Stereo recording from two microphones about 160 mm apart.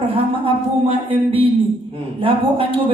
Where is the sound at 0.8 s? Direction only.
35° right (ahead or behind).